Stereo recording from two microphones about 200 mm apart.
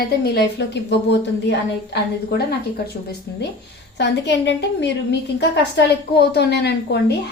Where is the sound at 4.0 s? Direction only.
60° left (ahead or behind).